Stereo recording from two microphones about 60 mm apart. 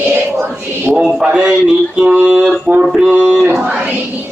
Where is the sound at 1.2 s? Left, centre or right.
Centre.